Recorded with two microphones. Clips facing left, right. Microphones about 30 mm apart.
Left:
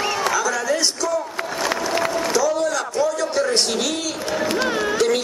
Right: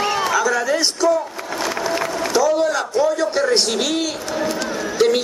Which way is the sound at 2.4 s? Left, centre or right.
Centre.